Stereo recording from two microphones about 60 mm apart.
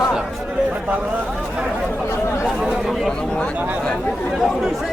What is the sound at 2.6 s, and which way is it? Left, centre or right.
Chatter, centre.